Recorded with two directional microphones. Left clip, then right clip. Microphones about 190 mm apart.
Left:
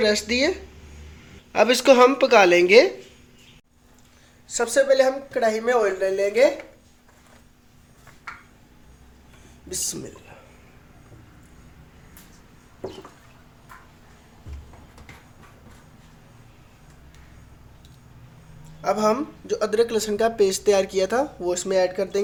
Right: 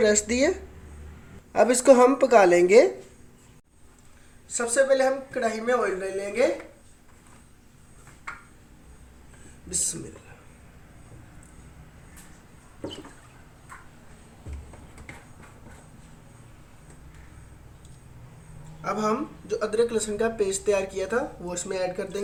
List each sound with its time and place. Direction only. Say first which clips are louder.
0.0 s a woman's voice: left 1 dB; 5° right (ahead or behind)
4.5 s speech: left 4 dB; 65° left (ahead or behind)
18.8 s speech: left 5 dB; 55° left (ahead or behind)